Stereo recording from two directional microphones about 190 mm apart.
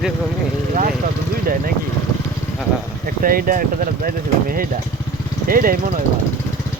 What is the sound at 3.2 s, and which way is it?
Speech, 50° right (ahead or behind).